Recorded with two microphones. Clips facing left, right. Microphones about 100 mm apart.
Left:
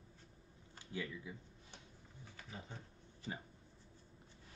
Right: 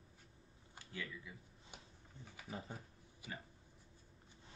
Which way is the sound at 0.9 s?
25° left (ahead or behind).